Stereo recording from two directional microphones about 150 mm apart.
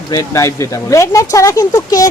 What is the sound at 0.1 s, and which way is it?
Speech, 20° left (ahead or behind).